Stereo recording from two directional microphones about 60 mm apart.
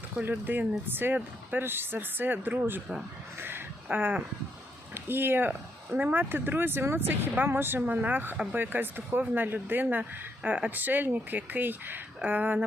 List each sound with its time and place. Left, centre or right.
0.2 s speech: right
3.8 s speech: right